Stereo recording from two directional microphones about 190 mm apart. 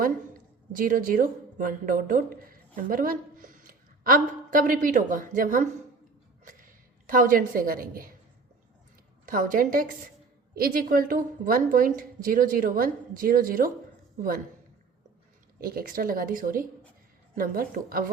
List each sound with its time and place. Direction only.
0.8 s a woman's voice: 45° right (ahead or behind)
6.4 s a sound: 45° right (ahead or behind)
7.1 s a woman's voice: 45° right (ahead or behind)
9.2 s a woman's voice: 45° right (ahead or behind)
15.6 s a woman's voice: 50° right (ahead or behind)